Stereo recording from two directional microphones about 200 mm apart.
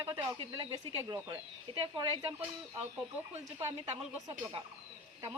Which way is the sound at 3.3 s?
30° right (ahead or behind).